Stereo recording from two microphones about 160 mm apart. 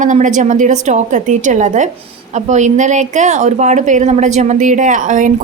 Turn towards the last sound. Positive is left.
turn(degrees=-50)  # may be behind; listen again after turning